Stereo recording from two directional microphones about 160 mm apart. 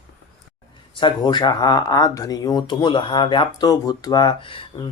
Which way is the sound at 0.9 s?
30° left (ahead or behind).